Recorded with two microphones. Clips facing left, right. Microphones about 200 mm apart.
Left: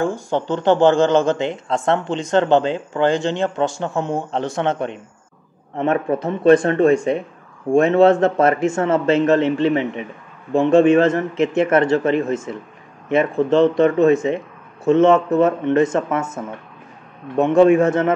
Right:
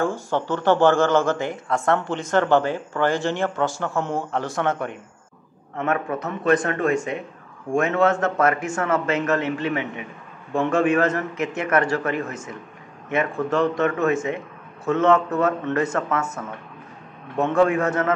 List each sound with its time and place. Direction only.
0.0 s speech: 15° left (ahead or behind)